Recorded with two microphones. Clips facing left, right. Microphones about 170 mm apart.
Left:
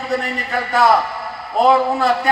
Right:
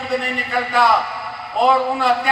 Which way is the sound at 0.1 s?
40° left (ahead or behind).